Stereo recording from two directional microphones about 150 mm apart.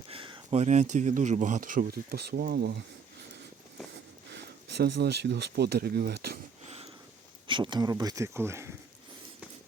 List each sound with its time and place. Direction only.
0.1 s speech: 40° right (ahead or behind); by 2.6 s 90° right
4.7 s speech: 90° right
7.4 s speech: 30° right (ahead or behind)